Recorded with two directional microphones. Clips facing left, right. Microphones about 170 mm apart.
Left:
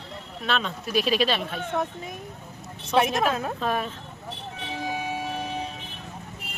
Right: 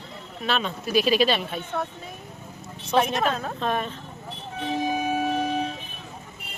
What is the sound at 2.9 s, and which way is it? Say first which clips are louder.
Speech: even; 5° left (ahead or behind).